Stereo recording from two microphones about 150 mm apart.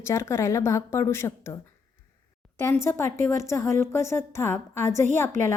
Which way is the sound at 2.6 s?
20° left (ahead or behind).